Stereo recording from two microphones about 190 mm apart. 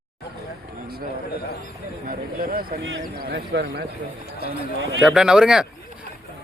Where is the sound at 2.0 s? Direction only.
50° right (ahead or behind).